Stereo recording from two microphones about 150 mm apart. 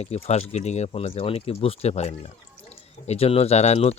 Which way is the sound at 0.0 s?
45° left (ahead or behind).